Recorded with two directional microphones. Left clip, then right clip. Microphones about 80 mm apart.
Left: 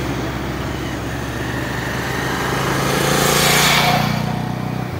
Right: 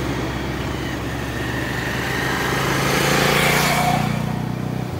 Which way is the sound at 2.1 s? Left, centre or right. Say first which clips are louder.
Even; centre.